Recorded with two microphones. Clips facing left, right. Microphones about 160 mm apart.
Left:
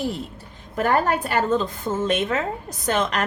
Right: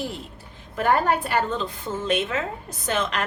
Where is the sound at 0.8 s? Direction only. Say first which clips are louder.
Left 1 dB; 45° left (ahead or behind).